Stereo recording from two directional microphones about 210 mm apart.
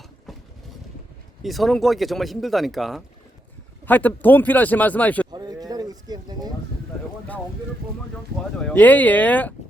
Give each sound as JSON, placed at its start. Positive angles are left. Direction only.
{"t": 0.3, "sound": "vehicle", "side_deg": 0}
{"t": 1.4, "sound": "speech", "side_deg": 0}
{"t": 5.3, "sound": "a sound", "side_deg": -20}
{"t": 8.5, "sound": "speech", "side_deg": 5}